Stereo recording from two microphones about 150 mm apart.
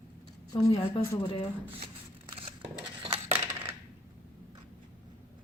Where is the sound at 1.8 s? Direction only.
35° right (ahead or behind).